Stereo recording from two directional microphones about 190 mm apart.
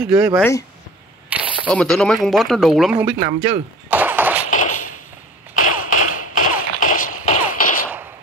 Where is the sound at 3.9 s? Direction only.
10° right (ahead or behind).